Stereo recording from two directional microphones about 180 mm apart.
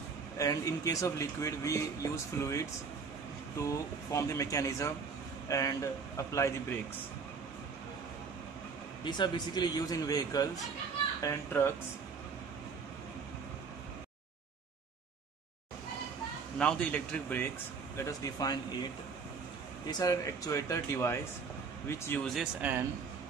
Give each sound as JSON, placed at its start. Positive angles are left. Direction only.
{"t": 0.4, "sound": "speech", "side_deg": 20}
{"t": 9.0, "sound": "a man's voice", "side_deg": 25}
{"t": 16.5, "sound": "speech", "side_deg": 5}
{"t": 17.9, "sound": "a man's voice", "side_deg": 20}
{"t": 19.9, "sound": "speech", "side_deg": 20}
{"t": 22.2, "sound": "speech", "side_deg": 0}